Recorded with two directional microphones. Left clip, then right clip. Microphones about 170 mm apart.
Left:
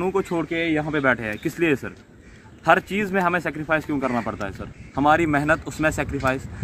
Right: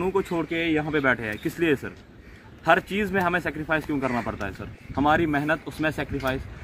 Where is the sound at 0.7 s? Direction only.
25° left (ahead or behind).